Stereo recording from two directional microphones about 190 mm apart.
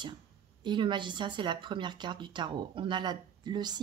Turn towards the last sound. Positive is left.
turn(degrees=-20)  # may be behind; listen again after turning